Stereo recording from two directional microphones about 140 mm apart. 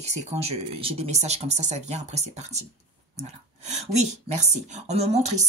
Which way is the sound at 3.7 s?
55° right (ahead or behind).